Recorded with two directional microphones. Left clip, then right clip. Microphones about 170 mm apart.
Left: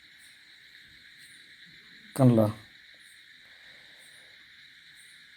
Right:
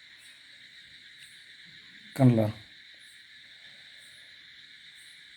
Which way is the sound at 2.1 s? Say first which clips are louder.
Left 2 dB; 5° left (ahead or behind).